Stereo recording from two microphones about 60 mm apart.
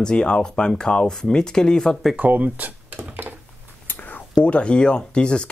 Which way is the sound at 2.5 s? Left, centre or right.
Right.